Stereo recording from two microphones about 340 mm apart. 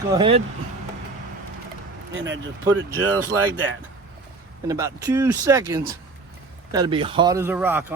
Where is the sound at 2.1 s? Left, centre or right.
Right.